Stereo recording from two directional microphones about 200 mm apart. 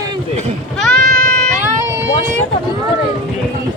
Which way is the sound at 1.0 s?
45° right (ahead or behind).